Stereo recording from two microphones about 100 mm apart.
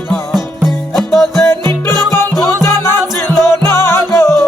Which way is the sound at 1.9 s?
40° right (ahead or behind).